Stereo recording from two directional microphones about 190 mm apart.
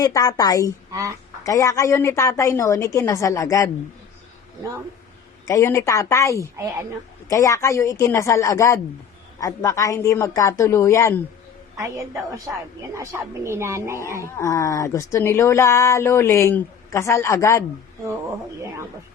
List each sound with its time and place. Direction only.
0.0 s a woman's voice: 20° left (ahead or behind)
5.5 s speech: 15° left (ahead or behind)
6.6 s a woman's voice: 15° right (ahead or behind)
7.3 s speech: 15° left (ahead or behind)
11.8 s a woman's voice: 15° right (ahead or behind)
14.3 s speech: 15° left (ahead or behind)